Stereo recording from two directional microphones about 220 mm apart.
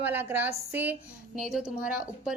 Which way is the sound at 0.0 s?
10° right (ahead or behind).